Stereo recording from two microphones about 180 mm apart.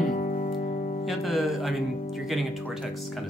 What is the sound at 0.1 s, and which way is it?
Music, 45° left (ahead or behind).